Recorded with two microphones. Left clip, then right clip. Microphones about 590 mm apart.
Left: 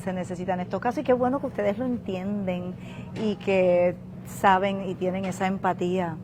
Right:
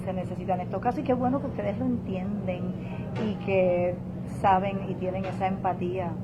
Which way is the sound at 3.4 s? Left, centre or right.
Left.